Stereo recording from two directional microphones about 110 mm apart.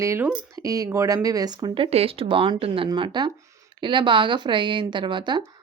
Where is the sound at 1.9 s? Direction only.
65° right (ahead or behind); by 5.4 s 45° right (ahead or behind).